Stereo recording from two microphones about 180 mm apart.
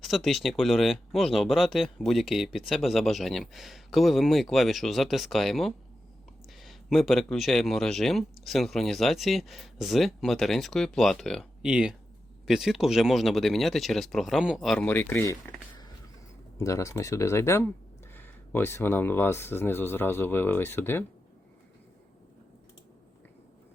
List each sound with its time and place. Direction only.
0.0 s speech: centre (ahead or behind)
16.6 s speech: 15° left (ahead or behind)